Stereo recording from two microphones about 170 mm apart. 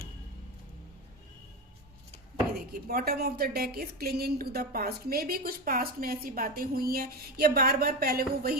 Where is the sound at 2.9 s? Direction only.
60° right (ahead or behind).